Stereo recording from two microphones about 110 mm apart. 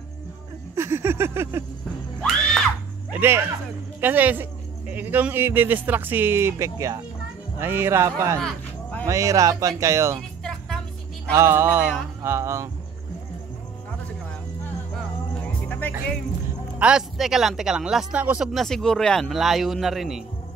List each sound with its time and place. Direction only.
0.7 s a sound: 25° right (ahead or behind)
2.2 s screaming: centre (ahead or behind)
3.1 s speech: 20° right (ahead or behind)
7.5 s mantra: 20° right (ahead or behind)
11.3 s mantra: 25° right (ahead or behind)
15.4 s music: 15° left (ahead or behind)
16.7 s speech: 10° right (ahead or behind)
18.5 s speech: centre (ahead or behind)